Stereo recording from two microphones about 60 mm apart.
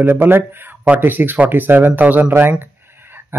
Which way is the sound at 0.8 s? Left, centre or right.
Right.